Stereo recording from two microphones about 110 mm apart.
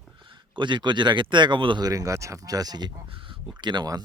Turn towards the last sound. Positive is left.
turn(degrees=-40)  # may be behind; listen again after turning